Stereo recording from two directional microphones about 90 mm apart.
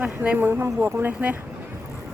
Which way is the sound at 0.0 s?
15° right (ahead or behind).